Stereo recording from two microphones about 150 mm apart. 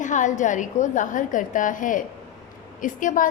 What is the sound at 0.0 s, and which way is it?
A woman's voice, 55° left (ahead or behind).